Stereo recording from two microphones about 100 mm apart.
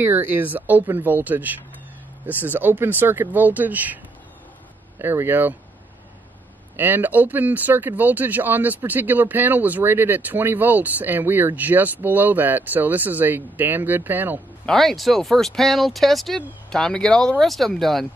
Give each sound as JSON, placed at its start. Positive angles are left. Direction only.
{"t": 0.0, "sound": "speech", "side_deg": -20}
{"t": 6.8, "sound": "speech", "side_deg": -20}
{"t": 14.7, "sound": "speech", "side_deg": 5}